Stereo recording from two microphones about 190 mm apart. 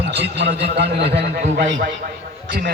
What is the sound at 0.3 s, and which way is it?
Speech, 65° right (ahead or behind).